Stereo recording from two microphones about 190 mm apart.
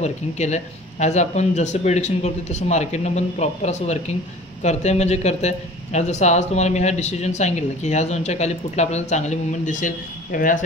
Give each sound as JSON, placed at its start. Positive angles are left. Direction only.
{"t": 0.0, "sound": "speech", "side_deg": 35}